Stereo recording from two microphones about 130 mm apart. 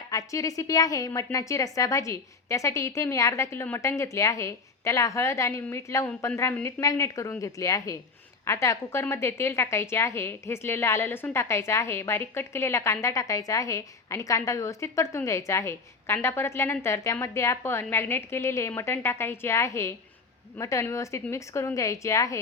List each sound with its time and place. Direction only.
0.1 s a woman's voice: 25° left (ahead or behind)